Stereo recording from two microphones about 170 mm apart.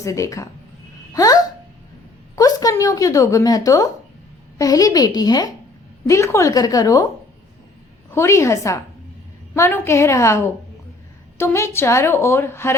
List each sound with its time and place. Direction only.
0.0 s a woman's voice: 20° left (ahead or behind)
8.1 s a woman's voice: 15° left (ahead or behind)